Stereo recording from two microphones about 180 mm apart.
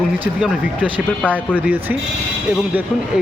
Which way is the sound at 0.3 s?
5° right (ahead or behind).